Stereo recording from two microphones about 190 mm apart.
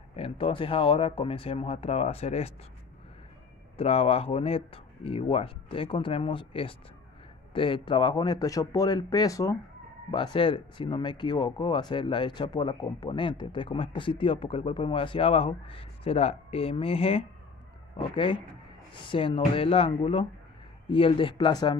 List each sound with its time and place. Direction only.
0.1 s speech: 30° left (ahead or behind)
3.7 s speech: 30° left (ahead or behind)